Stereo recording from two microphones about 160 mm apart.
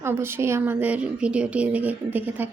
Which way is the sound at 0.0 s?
15° right (ahead or behind).